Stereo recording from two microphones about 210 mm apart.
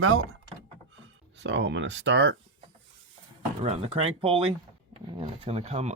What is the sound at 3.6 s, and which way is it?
Speech, 30° right (ahead or behind).